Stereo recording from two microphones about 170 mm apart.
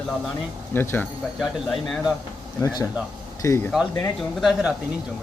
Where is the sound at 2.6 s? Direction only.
20° left (ahead or behind).